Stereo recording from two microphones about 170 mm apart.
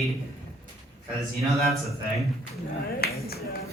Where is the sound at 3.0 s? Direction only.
65° left (ahead or behind).